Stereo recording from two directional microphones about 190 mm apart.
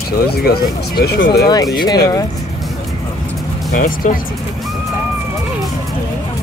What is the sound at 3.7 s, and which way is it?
Speech, 45° left (ahead or behind).